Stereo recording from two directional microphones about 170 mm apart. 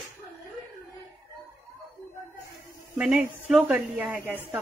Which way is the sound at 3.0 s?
5° right (ahead or behind).